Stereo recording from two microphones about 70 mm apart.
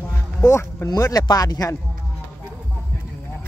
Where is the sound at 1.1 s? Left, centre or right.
Left.